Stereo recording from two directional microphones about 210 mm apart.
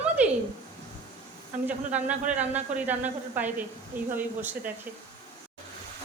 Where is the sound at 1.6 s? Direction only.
5° right (ahead or behind).